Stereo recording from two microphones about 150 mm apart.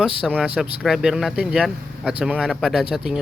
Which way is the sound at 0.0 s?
5° right (ahead or behind).